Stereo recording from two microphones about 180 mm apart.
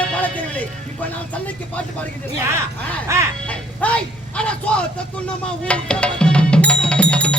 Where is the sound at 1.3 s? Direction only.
10° left (ahead or behind).